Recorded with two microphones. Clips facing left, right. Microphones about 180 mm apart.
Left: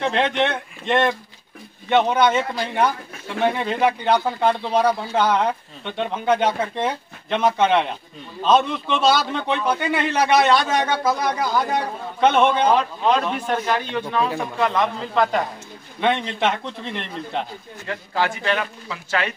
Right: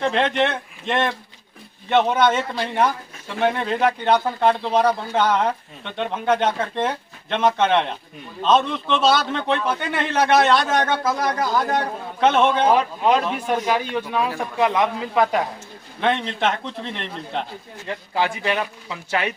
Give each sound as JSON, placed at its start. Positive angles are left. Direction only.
{"t": 0.0, "sound": "a man's voice", "side_deg": 0}
{"t": 17.8, "sound": "a man's voice", "side_deg": -15}